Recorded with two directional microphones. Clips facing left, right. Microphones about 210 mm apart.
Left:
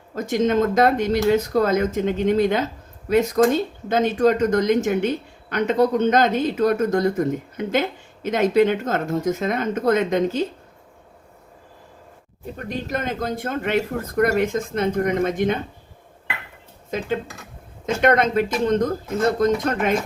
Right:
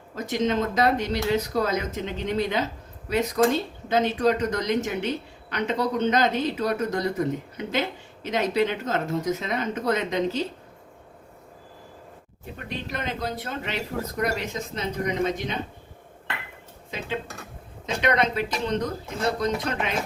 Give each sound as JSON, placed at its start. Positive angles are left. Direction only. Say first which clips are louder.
{"t": 0.2, "sound": "speech", "louder": "left 5 dB", "side_deg": 50}
{"t": 12.5, "sound": "speech", "louder": "left 6 dB", "side_deg": 45}
{"t": 16.9, "sound": "speech", "louder": "left 6 dB", "side_deg": 45}